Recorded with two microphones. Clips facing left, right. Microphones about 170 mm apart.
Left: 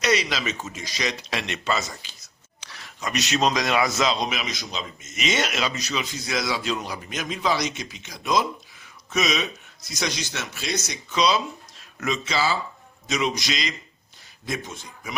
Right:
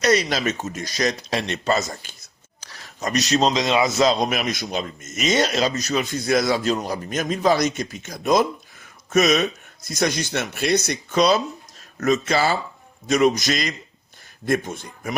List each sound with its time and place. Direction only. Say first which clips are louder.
0.0 s a man's voice: right 4 dB; 45° right (ahead or behind)
2.6 s a sound: right 4 dB; 40° right (ahead or behind)
3.5 s a man's voice: right 3 dB; 20° right (ahead or behind)
4.0 s a man's voice: right 5 dB; 45° right (ahead or behind)